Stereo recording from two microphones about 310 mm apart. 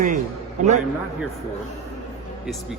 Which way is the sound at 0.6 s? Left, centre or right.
Right.